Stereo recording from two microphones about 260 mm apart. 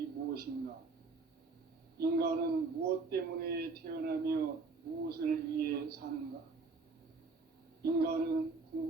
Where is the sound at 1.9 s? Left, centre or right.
Right.